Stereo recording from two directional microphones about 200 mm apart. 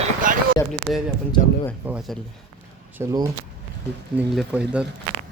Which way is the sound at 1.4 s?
30° left (ahead or behind).